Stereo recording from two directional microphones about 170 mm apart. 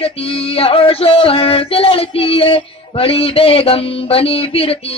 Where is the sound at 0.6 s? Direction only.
35° left (ahead or behind).